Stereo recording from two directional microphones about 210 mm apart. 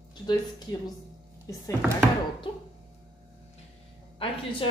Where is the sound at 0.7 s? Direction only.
20° left (ahead or behind).